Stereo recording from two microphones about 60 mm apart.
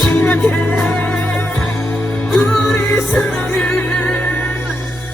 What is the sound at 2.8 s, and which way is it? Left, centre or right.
Music, left.